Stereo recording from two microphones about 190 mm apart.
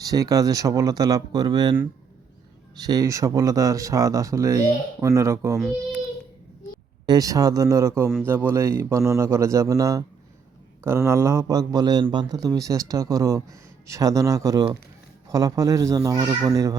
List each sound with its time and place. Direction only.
0.0 s speech: 20° right (ahead or behind)
2.7 s a man's voice: 20° right (ahead or behind)
5.5 s a child's voice: centre (ahead or behind)
7.0 s a man's voice: 20° right (ahead or behind)